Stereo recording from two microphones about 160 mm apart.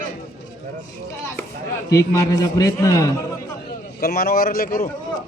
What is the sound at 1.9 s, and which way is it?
A man's voice, 20° left (ahead or behind).